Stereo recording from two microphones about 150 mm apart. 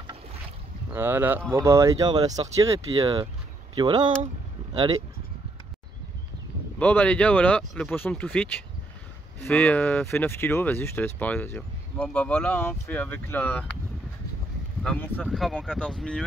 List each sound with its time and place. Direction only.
0.9 s speech: 15° right (ahead or behind)
2.9 s speech: 40° right (ahead or behind)
6.8 s speech: 10° left (ahead or behind)
14.8 s speech: 10° left (ahead or behind)
15.2 s speech: centre (ahead or behind)